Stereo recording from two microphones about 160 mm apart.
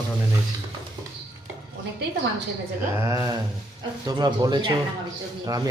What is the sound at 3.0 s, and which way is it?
Speech, 20° right (ahead or behind).